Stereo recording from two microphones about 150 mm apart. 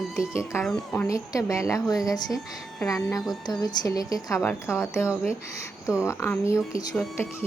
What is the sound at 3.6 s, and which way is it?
A woman's voice, 25° left (ahead or behind).